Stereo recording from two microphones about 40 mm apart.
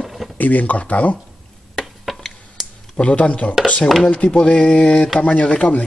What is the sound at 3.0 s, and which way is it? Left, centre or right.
Speech, left.